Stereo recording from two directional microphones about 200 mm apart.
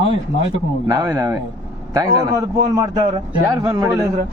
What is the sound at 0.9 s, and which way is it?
A man's voice, 15° right (ahead or behind).